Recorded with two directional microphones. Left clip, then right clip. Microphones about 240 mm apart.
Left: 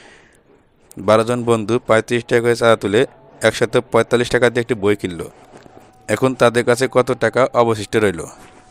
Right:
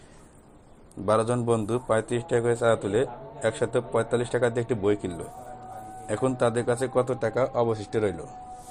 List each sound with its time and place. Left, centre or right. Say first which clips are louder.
1.0 s a man's voice: left 9 dB; left